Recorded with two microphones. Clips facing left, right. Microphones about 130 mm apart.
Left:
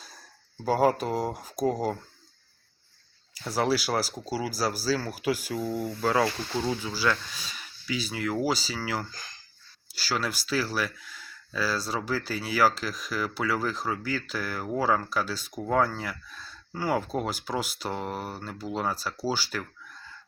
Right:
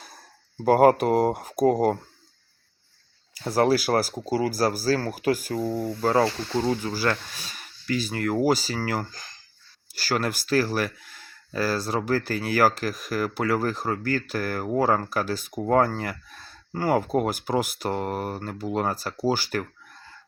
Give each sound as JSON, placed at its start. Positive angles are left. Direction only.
{"t": 0.6, "sound": "speech", "side_deg": -60}
{"t": 3.5, "sound": "speech", "side_deg": -50}
{"t": 6.7, "sound": "speech", "side_deg": -50}